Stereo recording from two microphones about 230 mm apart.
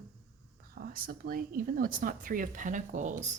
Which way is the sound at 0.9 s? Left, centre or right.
Right.